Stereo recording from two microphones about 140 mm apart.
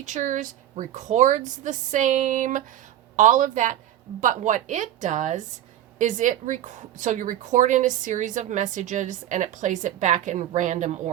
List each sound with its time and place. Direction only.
0.0 s a woman's voice: 60° right (ahead or behind)